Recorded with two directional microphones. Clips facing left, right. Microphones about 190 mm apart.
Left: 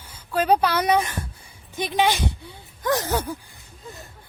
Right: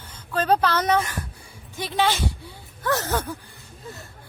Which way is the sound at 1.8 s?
15° left (ahead or behind).